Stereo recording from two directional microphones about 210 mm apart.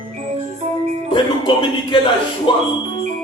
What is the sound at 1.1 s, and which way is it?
Music, 25° left (ahead or behind).